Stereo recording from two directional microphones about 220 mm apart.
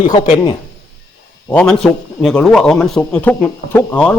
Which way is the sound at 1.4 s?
5° left (ahead or behind).